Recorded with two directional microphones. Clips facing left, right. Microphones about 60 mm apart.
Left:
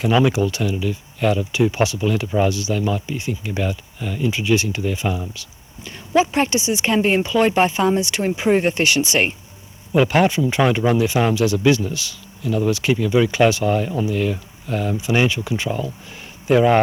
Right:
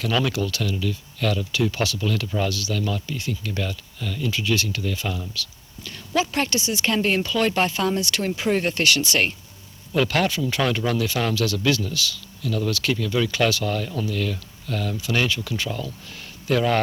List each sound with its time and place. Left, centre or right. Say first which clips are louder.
0.0 s speech: left 6 dB; left